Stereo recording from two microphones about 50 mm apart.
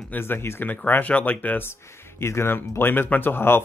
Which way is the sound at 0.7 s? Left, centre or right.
Left.